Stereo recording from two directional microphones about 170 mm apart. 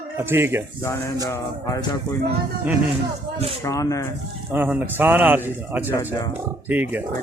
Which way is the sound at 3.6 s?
20° left (ahead or behind).